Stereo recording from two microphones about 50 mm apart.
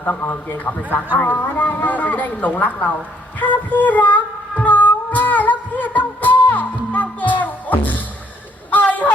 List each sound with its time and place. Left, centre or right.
0.2 s a man's voice: left
3.4 s music: left
8.7 s a sound: left